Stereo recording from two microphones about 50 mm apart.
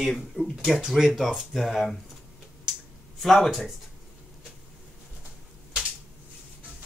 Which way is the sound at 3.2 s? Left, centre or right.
Centre.